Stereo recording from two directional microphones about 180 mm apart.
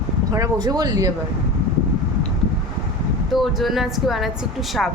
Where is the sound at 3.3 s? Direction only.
Centre (ahead or behind).